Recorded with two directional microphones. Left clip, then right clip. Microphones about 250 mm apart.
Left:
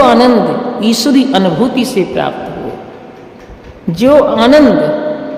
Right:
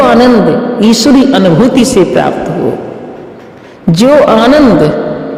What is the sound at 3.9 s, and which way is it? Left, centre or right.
Speech, right.